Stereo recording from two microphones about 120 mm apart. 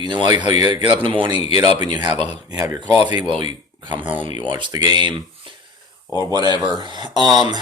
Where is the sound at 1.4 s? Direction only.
55° left (ahead or behind).